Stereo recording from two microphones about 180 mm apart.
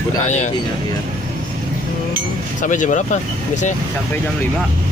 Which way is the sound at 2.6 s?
45° left (ahead or behind).